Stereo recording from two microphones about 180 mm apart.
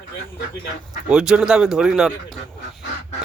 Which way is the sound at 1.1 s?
5° right (ahead or behind).